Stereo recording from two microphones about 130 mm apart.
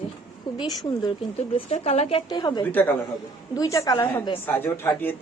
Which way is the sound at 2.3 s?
30° left (ahead or behind).